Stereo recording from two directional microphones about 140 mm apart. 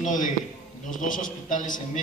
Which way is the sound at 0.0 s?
65° left (ahead or behind).